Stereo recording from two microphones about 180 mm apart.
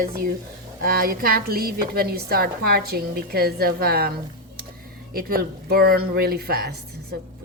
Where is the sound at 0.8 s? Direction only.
50° right (ahead or behind).